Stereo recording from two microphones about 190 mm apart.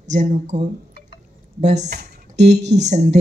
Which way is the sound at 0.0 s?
40° right (ahead or behind).